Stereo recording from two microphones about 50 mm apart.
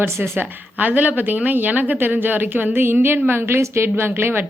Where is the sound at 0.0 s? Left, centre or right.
Right.